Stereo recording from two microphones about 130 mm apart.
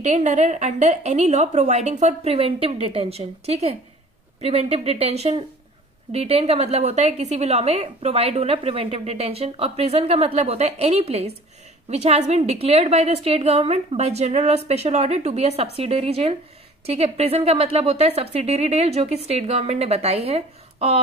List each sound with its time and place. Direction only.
0.0 s a woman's voice: 65° right (ahead or behind); by 21.0 s 50° right (ahead or behind)